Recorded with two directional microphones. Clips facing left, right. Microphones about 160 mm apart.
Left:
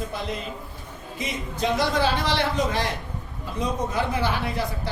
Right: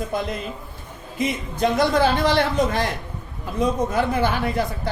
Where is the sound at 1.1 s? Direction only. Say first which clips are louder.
Right 7 dB; 50° right (ahead or behind).